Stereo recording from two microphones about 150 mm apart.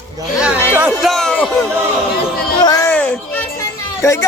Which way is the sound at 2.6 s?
25° left (ahead or behind).